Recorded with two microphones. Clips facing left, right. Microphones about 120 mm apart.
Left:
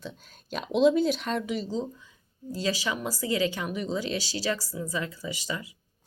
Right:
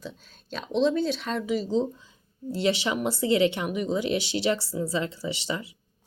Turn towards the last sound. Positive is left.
turn(degrees=-25)  # may be behind; listen again after turning